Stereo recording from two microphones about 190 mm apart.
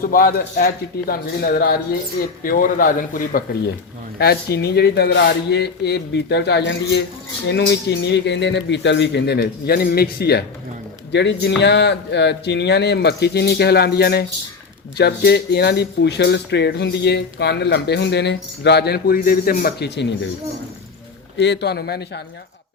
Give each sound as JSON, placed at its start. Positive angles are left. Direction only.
{"t": 0.0, "sound": "a man's voice", "side_deg": 50}
{"t": 4.2, "sound": "speech", "side_deg": 60}
{"t": 21.3, "sound": "speech", "side_deg": 65}